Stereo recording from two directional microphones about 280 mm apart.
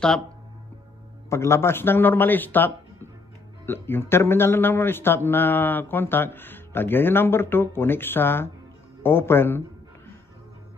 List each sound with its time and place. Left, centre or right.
1.3 s speech: centre